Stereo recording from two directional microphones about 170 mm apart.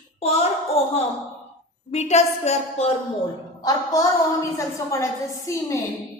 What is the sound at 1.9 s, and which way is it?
Speech, 40° left (ahead or behind).